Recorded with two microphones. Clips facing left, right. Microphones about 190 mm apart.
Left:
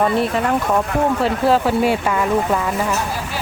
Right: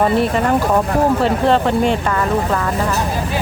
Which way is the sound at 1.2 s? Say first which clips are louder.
Right 2 dB; 5° left (ahead or behind).